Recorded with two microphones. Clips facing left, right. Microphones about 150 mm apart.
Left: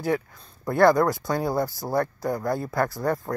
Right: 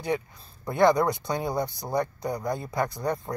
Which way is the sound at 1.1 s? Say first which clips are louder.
Left 3 dB; centre (ahead or behind).